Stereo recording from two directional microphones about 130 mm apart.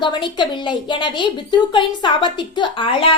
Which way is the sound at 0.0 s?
35° left (ahead or behind).